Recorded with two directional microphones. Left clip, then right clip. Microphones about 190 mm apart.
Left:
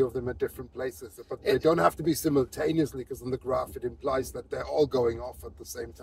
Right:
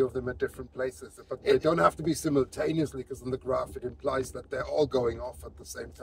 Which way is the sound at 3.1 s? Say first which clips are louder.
Left 1 dB; 25° right (ahead or behind).